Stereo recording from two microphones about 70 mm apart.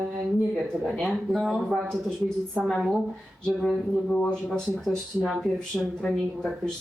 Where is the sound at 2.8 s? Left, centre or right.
Centre.